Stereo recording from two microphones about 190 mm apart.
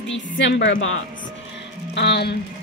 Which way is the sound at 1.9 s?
60° left (ahead or behind).